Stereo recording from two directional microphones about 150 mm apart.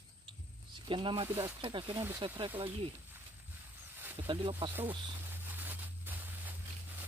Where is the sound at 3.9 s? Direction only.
15° right (ahead or behind).